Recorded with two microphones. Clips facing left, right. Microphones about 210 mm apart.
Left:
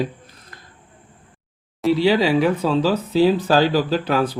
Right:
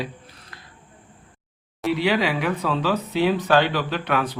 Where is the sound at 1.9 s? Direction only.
30° left (ahead or behind).